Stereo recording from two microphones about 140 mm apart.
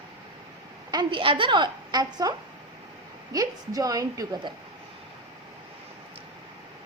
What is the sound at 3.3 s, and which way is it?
A woman's voice, 25° right (ahead or behind).